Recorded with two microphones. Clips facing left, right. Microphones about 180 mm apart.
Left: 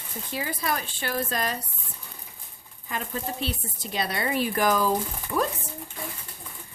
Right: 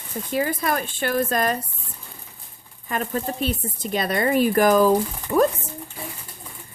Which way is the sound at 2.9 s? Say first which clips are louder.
Right 6 dB; 55° right (ahead or behind).